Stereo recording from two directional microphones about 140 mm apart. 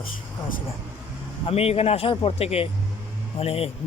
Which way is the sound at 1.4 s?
45° left (ahead or behind).